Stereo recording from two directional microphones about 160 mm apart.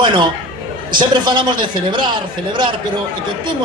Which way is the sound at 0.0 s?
30° right (ahead or behind).